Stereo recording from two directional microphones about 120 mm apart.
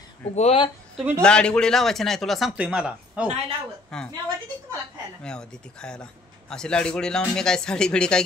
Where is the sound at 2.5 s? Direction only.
10° right (ahead or behind).